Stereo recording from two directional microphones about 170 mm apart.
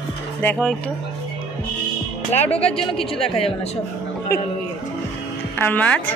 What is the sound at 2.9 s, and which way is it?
Speech, 35° left (ahead or behind).